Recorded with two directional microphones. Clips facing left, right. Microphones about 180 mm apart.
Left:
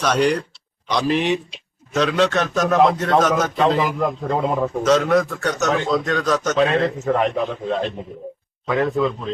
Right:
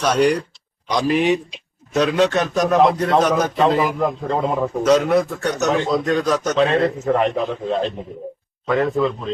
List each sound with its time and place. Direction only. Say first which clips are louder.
0.0 s a man's voice: right 2 dB; 10° right (ahead or behind)
3.9 s a man's voice: right 1 dB; centre (ahead or behind)
4.9 s a man's voice: right 1 dB; 15° right (ahead or behind)